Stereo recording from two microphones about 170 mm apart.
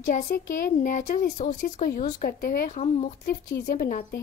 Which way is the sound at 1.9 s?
60° left (ahead or behind).